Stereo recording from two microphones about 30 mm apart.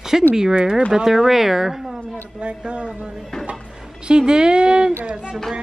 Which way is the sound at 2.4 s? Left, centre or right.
Right.